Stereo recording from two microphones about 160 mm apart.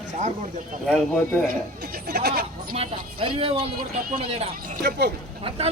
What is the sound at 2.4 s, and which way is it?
Speech, 35° right (ahead or behind).